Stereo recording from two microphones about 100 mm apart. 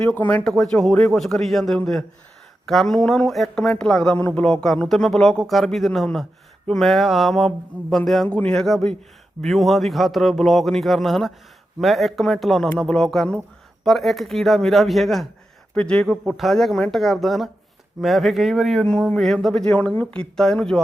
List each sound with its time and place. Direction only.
0.1 s speech: 15° left (ahead or behind)
0.4 s speech: centre (ahead or behind)